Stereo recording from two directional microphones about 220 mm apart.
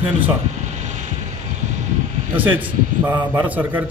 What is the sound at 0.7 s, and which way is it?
Vehicle, 35° right (ahead or behind).